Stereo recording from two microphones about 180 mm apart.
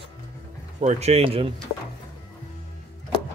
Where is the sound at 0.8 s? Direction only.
35° right (ahead or behind).